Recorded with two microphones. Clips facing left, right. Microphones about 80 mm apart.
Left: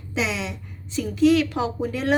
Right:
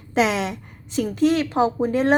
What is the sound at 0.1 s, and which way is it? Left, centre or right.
A woman's voice, right.